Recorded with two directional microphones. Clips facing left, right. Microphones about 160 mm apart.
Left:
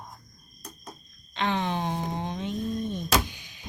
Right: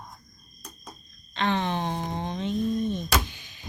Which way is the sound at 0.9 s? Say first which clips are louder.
Left 1 dB; 10° left (ahead or behind).